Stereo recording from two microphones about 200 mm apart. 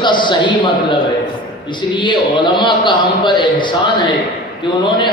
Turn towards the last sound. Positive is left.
turn(degrees=25)  # may be behind; listen again after turning